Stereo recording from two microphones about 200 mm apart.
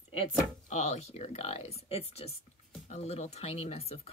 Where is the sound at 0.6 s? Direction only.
35° left (ahead or behind).